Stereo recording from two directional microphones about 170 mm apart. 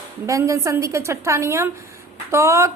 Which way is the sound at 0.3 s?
20° right (ahead or behind).